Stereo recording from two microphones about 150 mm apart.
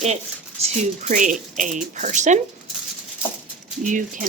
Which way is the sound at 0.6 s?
55° right (ahead or behind).